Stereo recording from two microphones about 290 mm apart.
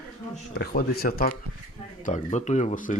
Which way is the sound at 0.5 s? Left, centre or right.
Left.